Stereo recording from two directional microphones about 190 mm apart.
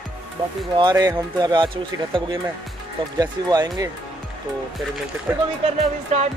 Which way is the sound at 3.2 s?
20° right (ahead or behind).